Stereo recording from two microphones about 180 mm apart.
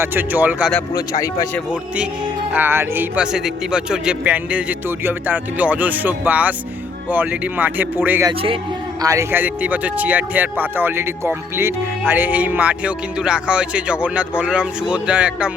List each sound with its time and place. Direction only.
0.0 s speech: 10° right (ahead or behind)
0.9 s speech: 20° left (ahead or behind)
2.5 s speech: 10° right (ahead or behind)
8.3 s speech: 30° right (ahead or behind)
9.0 s speech: 20° right (ahead or behind)